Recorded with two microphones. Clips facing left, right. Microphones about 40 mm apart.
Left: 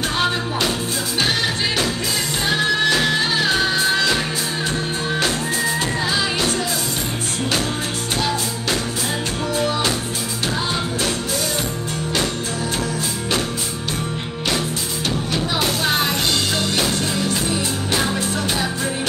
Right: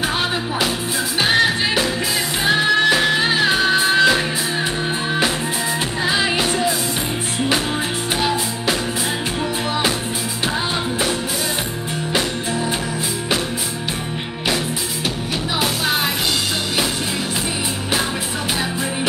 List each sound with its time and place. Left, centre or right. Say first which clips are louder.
2.4 s music: right 3 dB; centre
6.0 s music: right 5 dB; centre
15.6 s music: right 1 dB; centre